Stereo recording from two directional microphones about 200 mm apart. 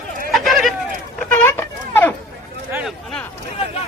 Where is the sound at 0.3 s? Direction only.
Centre (ahead or behind).